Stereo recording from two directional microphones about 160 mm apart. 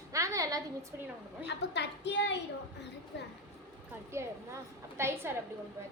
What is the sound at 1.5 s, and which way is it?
Speech, 90° left.